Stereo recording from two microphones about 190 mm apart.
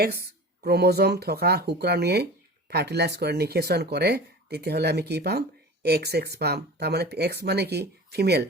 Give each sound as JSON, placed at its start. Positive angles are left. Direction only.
{"t": 0.0, "sound": "speech", "side_deg": -55}